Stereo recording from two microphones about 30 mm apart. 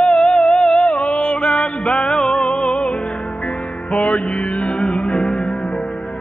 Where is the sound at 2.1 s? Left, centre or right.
Centre.